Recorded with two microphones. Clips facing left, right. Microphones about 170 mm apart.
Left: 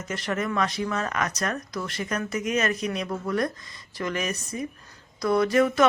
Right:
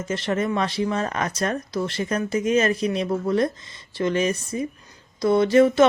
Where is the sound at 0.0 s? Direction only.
30° right (ahead or behind).